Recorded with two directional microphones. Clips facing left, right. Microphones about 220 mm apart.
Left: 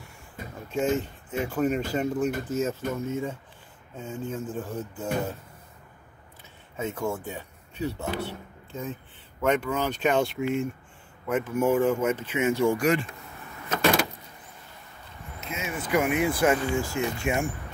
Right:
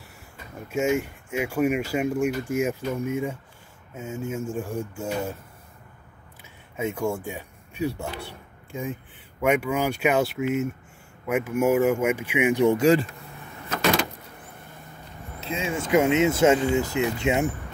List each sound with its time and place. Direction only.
0.7 s speech: 10° right (ahead or behind)
6.8 s speech: 10° right (ahead or behind); by 13.1 s 30° right (ahead or behind)
15.4 s speech: 30° right (ahead or behind)